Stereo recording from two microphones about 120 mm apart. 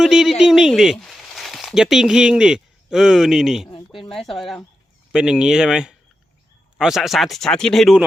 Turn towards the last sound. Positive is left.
turn(degrees=0)  # may be behind; listen again after turning